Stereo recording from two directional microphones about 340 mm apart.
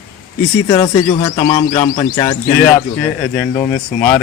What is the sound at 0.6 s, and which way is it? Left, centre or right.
A man's voice, centre.